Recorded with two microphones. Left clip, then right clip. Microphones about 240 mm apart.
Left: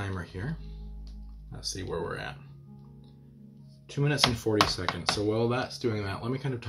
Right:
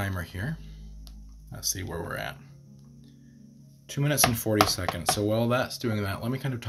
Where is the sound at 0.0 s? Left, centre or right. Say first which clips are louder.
Right 3 dB; right.